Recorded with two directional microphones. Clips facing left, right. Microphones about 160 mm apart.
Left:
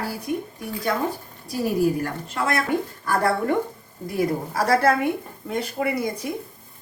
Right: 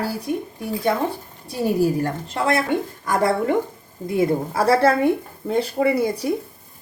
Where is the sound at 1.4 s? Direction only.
30° right (ahead or behind).